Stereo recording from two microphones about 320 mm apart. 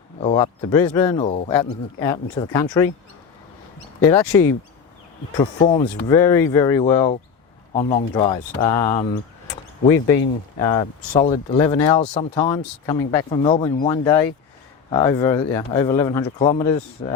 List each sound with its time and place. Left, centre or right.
0.2 s speech: centre
4.0 s speech: centre